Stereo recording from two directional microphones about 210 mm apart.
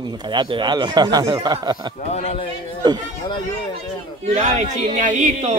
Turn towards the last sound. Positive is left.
turn(degrees=-35)  # may be behind; listen again after turning